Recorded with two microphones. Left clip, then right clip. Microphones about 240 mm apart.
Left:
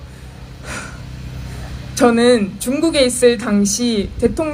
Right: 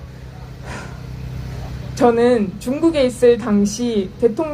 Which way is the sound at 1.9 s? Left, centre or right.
Left.